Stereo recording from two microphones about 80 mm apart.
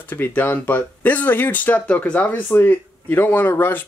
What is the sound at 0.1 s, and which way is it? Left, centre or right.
Speech, left.